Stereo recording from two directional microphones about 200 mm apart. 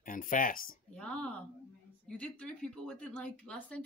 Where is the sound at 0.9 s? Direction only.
5° left (ahead or behind).